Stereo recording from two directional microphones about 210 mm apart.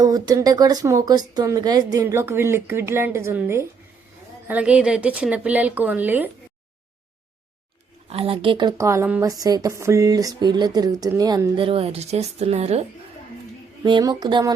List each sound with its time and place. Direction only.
0.0 s speech: 15° right (ahead or behind)
8.1 s a woman's voice: 25° right (ahead or behind)
13.8 s a woman's voice: 20° right (ahead or behind)